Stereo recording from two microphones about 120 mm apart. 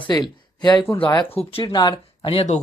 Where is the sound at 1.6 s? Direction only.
35° left (ahead or behind).